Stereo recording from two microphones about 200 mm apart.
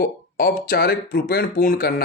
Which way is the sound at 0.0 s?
50° left (ahead or behind).